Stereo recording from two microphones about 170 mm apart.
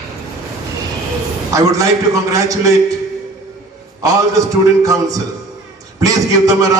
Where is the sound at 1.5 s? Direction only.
20° right (ahead or behind).